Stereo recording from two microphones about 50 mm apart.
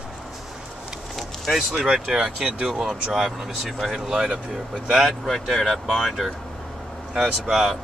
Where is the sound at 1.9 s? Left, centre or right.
Centre.